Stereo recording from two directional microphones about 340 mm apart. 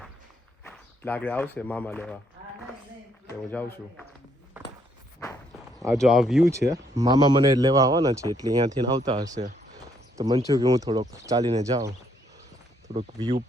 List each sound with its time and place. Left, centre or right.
0.6 s speech: centre
3.2 s speech: centre
5.8 s speech: centre